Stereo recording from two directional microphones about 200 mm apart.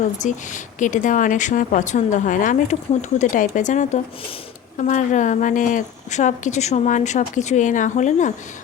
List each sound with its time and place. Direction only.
0.2 s a woman's voice: 40° left (ahead or behind)